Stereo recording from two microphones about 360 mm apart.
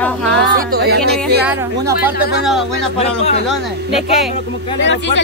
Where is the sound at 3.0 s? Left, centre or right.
Centre.